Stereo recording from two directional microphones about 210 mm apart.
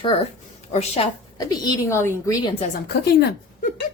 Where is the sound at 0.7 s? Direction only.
30° left (ahead or behind).